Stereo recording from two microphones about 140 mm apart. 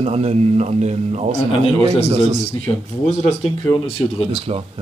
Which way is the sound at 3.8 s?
45° left (ahead or behind).